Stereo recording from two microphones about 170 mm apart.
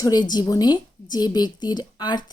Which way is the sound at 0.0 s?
25° left (ahead or behind).